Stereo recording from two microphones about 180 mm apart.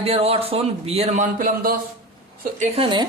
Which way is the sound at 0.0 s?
35° right (ahead or behind).